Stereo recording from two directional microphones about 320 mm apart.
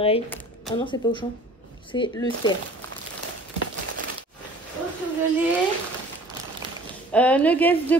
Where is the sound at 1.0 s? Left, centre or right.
Centre.